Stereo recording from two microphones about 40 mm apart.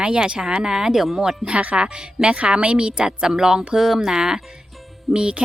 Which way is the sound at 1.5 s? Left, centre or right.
Right.